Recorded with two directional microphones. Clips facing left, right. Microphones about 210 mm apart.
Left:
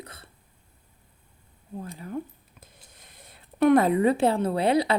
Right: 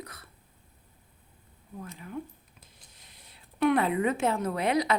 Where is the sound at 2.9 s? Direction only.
50° left (ahead or behind); by 4.9 s 30° left (ahead or behind).